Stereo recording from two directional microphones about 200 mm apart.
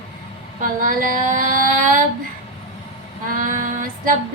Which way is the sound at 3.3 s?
40° right (ahead or behind).